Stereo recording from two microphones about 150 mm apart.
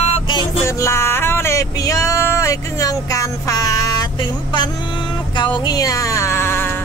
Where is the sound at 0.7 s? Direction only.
20° left (ahead or behind).